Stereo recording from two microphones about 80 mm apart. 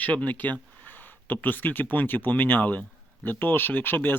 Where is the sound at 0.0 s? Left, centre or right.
Centre.